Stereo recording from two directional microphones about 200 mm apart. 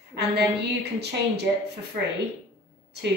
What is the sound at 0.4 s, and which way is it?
Speech, 55° right (ahead or behind).